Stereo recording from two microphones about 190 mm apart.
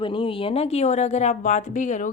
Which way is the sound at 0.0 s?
25° left (ahead or behind).